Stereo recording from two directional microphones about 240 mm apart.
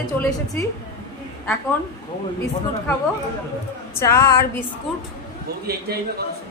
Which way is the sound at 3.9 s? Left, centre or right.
Centre.